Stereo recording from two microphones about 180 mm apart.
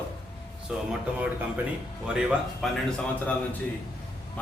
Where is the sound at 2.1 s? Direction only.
5° right (ahead or behind).